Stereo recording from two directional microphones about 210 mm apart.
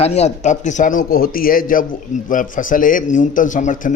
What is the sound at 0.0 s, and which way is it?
A man's voice, 30° left (ahead or behind).